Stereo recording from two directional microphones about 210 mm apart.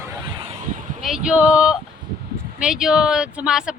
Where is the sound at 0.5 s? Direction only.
40° right (ahead or behind).